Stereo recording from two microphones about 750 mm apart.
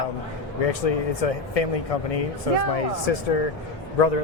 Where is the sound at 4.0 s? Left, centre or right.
Left.